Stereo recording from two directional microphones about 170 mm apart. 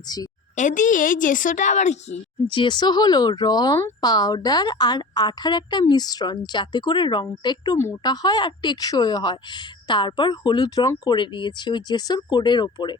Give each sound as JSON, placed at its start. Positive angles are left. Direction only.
{"t": 0.5, "sound": "a woman's voice", "side_deg": 50}
{"t": 2.5, "sound": "speech", "side_deg": 30}